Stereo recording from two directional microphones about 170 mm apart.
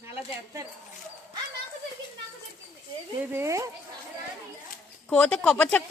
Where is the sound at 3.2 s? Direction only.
15° right (ahead or behind).